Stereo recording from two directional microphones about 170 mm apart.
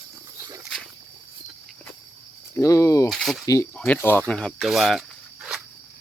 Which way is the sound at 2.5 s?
20° left (ahead or behind).